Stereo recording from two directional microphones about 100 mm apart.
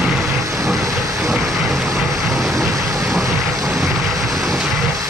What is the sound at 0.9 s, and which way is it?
Train, 35° right (ahead or behind).